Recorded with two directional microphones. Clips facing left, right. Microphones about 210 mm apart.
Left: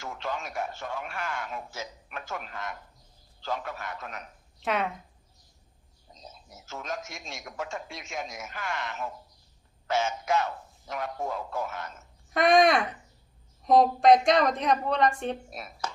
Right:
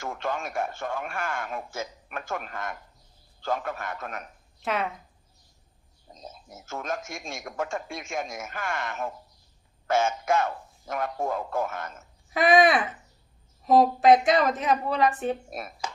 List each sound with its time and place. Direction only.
0.0 s a man's voice: 50° right (ahead or behind)
4.6 s a woman's voice: centre (ahead or behind)
6.1 s a man's voice: 50° right (ahead or behind)
12.3 s a woman's voice: 5° right (ahead or behind)
15.4 s a man's voice: 50° right (ahead or behind)